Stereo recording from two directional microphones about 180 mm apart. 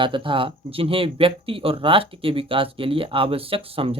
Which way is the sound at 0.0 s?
30° right (ahead or behind).